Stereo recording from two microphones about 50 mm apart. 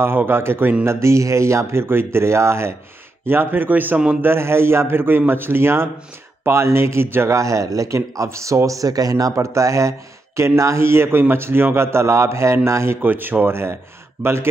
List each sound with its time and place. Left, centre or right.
0.3 s a man's voice: right
0.8 s speech: right
3.3 s speech: right
4.2 s a man's voice: right
7.3 s speech: right
13.0 s speech: right
14.2 s speech: right